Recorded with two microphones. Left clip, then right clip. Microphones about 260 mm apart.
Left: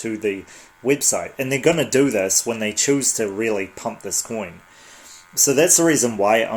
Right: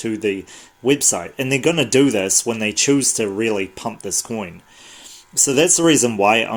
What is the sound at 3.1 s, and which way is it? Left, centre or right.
Speech, right.